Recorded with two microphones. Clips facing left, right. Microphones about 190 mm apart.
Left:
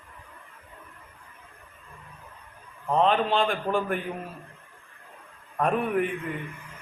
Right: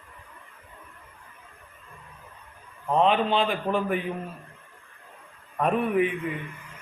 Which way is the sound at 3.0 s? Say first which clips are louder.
Right 1 dB; 5° right (ahead or behind).